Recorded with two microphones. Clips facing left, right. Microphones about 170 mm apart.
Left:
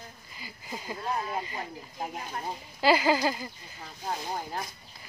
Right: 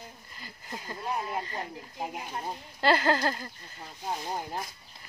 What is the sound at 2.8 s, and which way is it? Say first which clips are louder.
Speech: left 1 dB; 5° left (ahead or behind).